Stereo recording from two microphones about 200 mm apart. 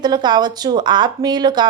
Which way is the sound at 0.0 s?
20° right (ahead or behind).